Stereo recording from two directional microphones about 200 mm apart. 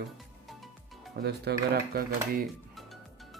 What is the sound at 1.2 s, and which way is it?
Speech, 50° right (ahead or behind).